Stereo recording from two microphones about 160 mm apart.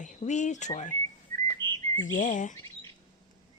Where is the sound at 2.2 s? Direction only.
50° left (ahead or behind).